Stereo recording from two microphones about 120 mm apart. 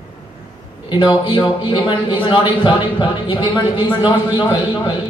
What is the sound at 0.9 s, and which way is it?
Speech, 40° left (ahead or behind).